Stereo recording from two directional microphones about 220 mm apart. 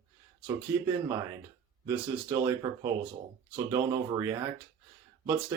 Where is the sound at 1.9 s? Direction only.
10° right (ahead or behind).